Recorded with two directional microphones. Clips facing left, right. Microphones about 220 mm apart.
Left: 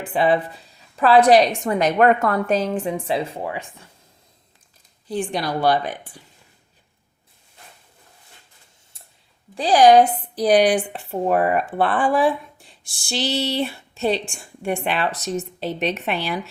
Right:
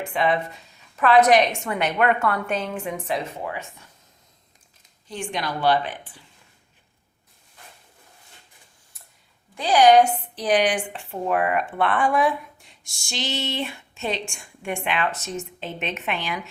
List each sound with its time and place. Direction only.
0.0 s speech: 35° left (ahead or behind)
5.0 s speech: 35° left (ahead or behind)
9.6 s speech: 35° left (ahead or behind)